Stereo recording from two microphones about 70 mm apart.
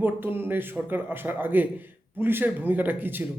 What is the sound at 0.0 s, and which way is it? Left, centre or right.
A man's voice, right.